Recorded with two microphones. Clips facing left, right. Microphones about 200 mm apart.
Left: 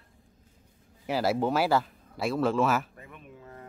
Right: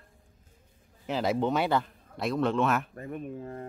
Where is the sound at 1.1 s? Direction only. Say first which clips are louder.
Left 1 dB; 5° left (ahead or behind).